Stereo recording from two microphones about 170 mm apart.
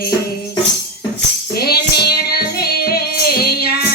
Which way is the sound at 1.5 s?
65° left (ahead or behind).